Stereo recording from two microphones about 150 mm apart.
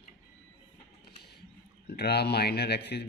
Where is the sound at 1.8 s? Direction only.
90° left.